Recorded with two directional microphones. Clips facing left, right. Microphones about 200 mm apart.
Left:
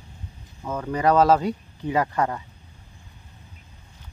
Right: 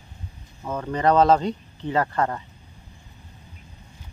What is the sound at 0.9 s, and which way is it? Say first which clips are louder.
Speech: even; 10° left (ahead or behind).